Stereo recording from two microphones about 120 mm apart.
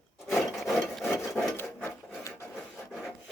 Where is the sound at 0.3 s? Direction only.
Centre (ahead or behind).